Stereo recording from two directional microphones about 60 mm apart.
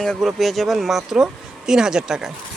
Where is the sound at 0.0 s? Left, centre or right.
Centre.